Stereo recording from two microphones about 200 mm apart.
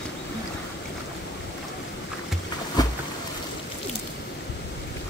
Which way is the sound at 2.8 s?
20° left (ahead or behind).